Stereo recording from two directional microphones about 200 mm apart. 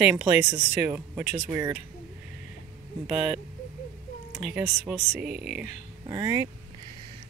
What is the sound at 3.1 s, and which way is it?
Speech, 5° right (ahead or behind).